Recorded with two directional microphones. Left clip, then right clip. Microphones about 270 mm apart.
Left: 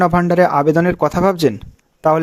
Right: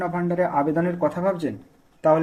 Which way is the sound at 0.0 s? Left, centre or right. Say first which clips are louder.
Left 11 dB; left.